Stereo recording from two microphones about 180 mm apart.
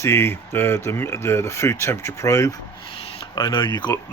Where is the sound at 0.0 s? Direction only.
15° left (ahead or behind).